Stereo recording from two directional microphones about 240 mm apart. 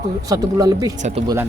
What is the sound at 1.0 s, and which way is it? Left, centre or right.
Speech, right.